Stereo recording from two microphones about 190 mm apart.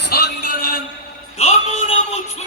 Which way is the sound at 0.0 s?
55° left (ahead or behind).